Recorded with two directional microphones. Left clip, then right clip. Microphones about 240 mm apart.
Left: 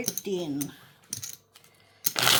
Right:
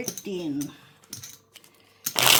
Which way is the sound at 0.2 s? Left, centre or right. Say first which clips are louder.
Even; left.